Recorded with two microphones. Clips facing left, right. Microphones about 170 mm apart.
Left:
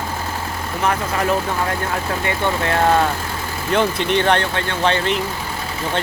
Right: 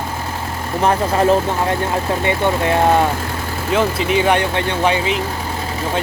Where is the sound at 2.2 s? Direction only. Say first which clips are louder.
Right 3 dB; 15° right (ahead or behind).